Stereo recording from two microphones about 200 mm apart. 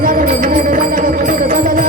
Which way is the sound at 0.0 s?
45° right (ahead or behind).